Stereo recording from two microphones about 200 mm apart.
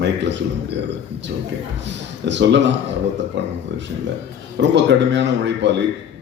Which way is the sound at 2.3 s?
65° right (ahead or behind).